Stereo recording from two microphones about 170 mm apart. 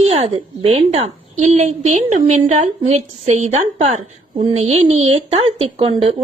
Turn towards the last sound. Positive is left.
turn(degrees=-35)  # may be behind; listen again after turning